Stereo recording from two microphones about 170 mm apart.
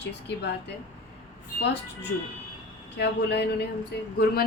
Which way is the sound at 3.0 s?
75° left (ahead or behind).